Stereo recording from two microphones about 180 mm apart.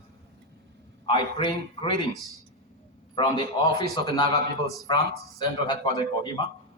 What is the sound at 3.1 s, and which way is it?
A man's voice, 25° left (ahead or behind).